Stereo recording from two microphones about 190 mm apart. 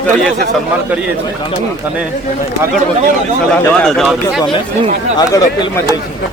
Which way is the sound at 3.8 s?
Centre (ahead or behind).